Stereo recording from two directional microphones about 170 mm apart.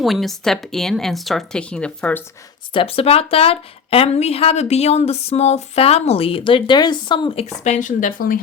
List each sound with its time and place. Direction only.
0.0 s speech: centre (ahead or behind)
2.7 s speech: 35° left (ahead or behind); by 8.4 s 55° left (ahead or behind)